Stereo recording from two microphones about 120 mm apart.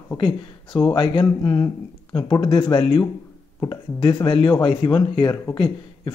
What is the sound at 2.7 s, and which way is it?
Speech, 45° left (ahead or behind).